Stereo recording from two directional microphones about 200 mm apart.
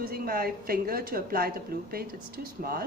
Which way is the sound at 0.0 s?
50° right (ahead or behind).